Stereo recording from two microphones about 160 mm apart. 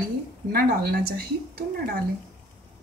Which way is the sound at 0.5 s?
70° right (ahead or behind).